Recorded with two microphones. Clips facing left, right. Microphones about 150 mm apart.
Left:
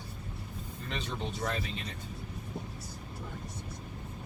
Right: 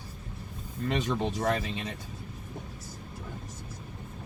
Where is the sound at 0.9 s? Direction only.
90° right.